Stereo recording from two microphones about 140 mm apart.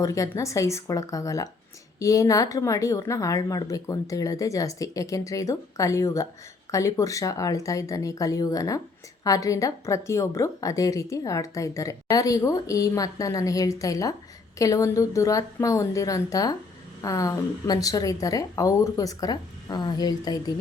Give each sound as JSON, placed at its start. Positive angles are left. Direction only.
{"t": 0.0, "sound": "a woman's voice", "side_deg": 20}